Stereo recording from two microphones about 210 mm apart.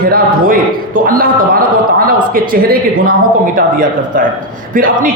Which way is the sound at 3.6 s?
40° right (ahead or behind).